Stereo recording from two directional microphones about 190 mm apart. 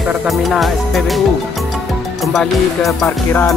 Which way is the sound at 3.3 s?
10° left (ahead or behind).